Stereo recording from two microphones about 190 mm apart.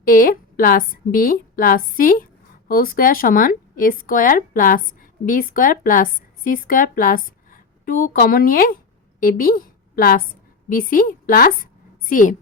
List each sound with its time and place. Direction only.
0.0 s a woman's voice: 50° left (ahead or behind)